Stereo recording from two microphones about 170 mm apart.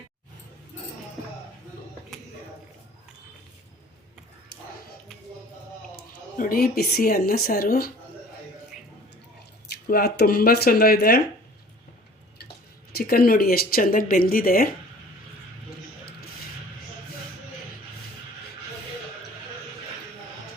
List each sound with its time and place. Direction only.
6.3 s speech: 55° left (ahead or behind)
9.8 s speech: 65° left (ahead or behind)
12.9 s speech: 65° left (ahead or behind)